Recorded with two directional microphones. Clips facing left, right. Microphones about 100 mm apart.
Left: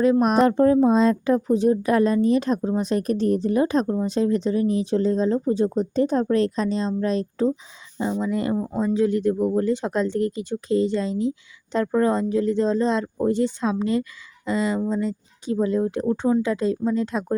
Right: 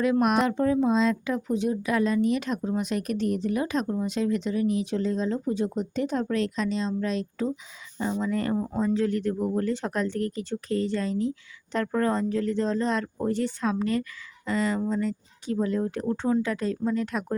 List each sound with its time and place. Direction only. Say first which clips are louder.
0.0 s speech: left 5 dB; 30° left (ahead or behind)
8.1 s speech: left 3 dB; 15° left (ahead or behind)
8.5 s speech: left 2 dB; 5° left (ahead or behind)
8.8 s speech: left 5 dB; 15° left (ahead or behind)